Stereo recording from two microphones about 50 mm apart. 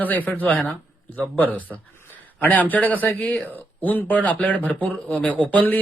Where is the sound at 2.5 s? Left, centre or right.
Left.